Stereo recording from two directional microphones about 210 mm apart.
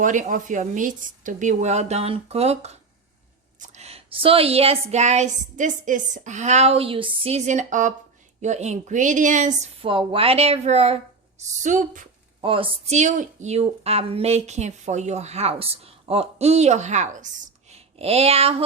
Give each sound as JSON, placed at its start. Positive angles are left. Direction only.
{"t": 0.0, "sound": "a woman's voice", "side_deg": -35}
{"t": 9.9, "sound": "a woman's voice", "side_deg": -25}
{"t": 12.4, "sound": "a woman's voice", "side_deg": -25}
{"t": 17.7, "sound": "a sound", "side_deg": -30}